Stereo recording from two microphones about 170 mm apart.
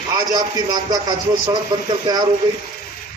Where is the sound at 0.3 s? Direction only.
25° right (ahead or behind).